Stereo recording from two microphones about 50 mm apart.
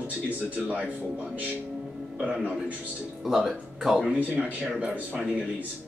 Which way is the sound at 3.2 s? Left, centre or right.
Centre.